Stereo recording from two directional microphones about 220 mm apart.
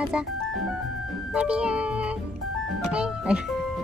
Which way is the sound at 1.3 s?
5° right (ahead or behind).